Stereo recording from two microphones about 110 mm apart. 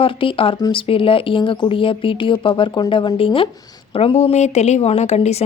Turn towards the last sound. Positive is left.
turn(degrees=90)